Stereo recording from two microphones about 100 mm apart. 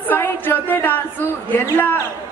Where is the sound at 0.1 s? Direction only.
20° left (ahead or behind).